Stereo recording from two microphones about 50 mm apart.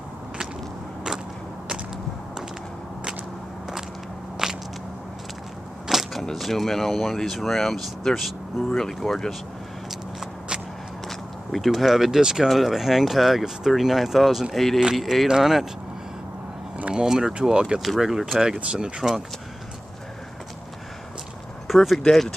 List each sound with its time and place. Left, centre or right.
4.4 s biting: centre
5.9 s a sound: centre
6.3 s speech: centre
11.1 s speech: centre
12.4 s speech: centre
16.9 s speech: centre
17.7 s speech: centre
21.6 s speech: centre